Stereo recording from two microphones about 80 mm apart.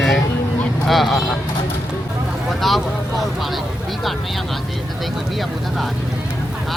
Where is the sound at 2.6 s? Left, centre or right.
Centre.